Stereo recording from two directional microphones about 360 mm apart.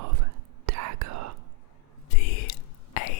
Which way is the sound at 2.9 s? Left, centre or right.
Left.